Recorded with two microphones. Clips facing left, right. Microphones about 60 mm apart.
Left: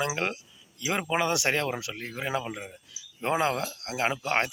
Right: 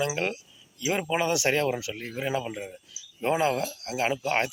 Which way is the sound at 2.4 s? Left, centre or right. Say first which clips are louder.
Right 2 dB; left.